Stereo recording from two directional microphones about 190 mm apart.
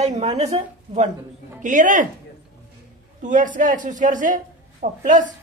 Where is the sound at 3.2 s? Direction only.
40° right (ahead or behind).